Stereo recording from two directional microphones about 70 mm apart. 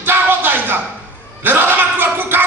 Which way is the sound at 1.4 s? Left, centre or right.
Right.